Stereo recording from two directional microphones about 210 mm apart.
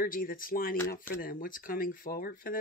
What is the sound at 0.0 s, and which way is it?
Speech, 40° left (ahead or behind).